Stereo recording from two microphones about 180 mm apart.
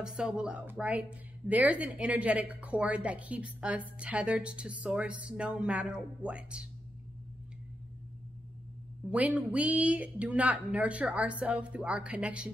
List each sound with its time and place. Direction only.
0.0 s a woman's voice: 5° right (ahead or behind)
9.1 s a woman's voice: 10° right (ahead or behind)